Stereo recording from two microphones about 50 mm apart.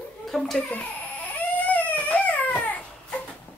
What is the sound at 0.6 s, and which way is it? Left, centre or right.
Speech, left.